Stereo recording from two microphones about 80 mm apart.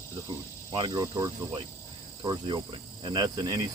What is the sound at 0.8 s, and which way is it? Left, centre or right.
Speech, right.